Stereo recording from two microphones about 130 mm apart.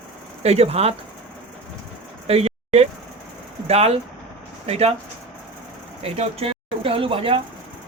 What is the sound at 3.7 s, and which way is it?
Speech, 55° right (ahead or behind).